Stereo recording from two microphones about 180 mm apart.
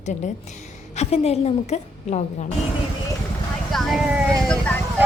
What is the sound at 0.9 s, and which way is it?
A woman's voice, 35° left (ahead or behind).